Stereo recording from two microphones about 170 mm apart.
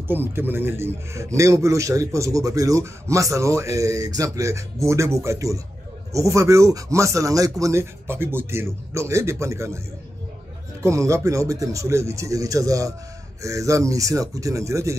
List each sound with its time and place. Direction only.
0.1 s speech: 10° right (ahead or behind)
10.8 s speech: 15° right (ahead or behind)